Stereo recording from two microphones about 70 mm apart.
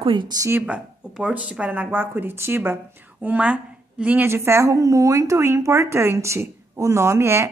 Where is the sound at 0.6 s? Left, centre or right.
Centre; by 2.8 s right.